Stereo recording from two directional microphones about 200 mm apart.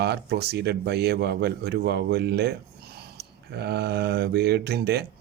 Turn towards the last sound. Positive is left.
turn(degrees=-55)  # may be behind; listen again after turning